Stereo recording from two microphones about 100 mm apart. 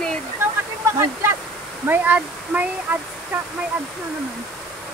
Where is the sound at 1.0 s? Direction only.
25° right (ahead or behind).